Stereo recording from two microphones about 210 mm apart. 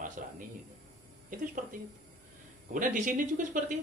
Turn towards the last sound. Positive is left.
turn(degrees=-40)  # may be behind; listen again after turning